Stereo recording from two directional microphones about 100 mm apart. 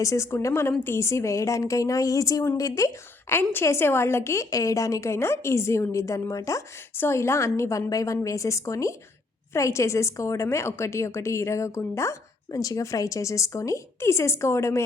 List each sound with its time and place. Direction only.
0.0 s a woman's voice: 30° left (ahead or behind)